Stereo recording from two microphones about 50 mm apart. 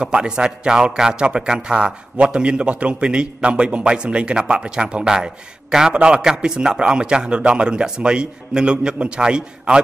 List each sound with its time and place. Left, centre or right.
0.0 s a man's voice: centre